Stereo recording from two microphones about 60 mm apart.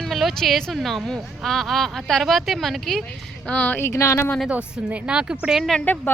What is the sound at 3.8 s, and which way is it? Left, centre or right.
Speech, left.